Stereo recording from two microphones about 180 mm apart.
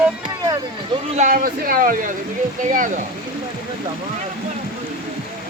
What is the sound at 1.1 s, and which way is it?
Speech, 45° right (ahead or behind).